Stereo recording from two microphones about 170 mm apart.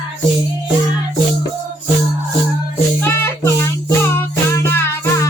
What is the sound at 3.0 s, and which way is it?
Music, 15° left (ahead or behind).